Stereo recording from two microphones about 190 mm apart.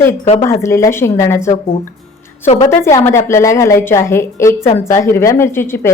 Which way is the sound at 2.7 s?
15° left (ahead or behind).